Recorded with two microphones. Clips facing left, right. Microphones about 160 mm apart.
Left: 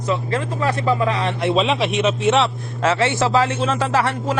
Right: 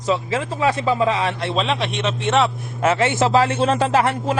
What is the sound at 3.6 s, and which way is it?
Speech, 30° right (ahead or behind).